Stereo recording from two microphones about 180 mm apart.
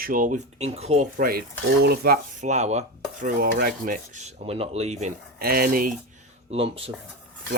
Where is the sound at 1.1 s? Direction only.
55° right (ahead or behind).